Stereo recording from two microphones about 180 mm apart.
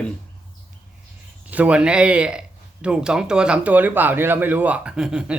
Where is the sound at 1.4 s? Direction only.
10° right (ahead or behind).